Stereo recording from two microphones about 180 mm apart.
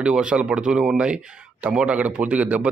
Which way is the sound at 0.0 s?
5° right (ahead or behind).